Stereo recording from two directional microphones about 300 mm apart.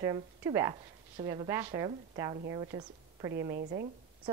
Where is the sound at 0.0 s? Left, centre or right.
Centre.